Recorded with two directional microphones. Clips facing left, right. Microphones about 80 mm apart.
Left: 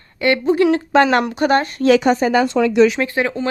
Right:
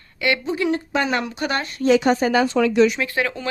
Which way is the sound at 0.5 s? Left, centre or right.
Left.